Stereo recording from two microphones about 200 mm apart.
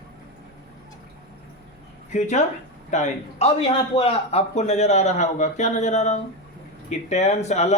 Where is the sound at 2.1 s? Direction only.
35° left (ahead or behind).